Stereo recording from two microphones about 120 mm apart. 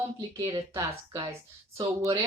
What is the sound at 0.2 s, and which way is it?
Speech, 30° right (ahead or behind).